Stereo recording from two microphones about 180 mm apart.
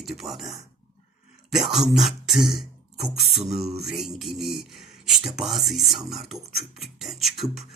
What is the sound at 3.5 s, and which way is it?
Mantra, 35° right (ahead or behind).